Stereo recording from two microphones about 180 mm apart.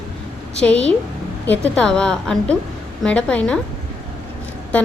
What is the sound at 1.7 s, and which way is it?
A woman's voice, 5° left (ahead or behind).